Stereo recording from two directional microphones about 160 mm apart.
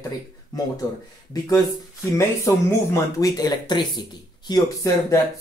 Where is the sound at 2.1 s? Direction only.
20° left (ahead or behind).